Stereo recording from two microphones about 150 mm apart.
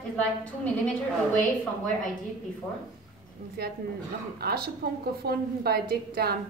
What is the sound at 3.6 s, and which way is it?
A woman's voice, 90° right.